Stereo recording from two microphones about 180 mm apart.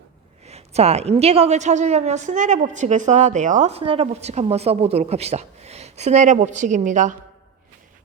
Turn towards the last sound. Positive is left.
turn(degrees=-45)  # may be behind; listen again after turning